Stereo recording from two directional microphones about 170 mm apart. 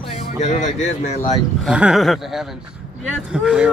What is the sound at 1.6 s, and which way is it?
Speech, 5° right (ahead or behind).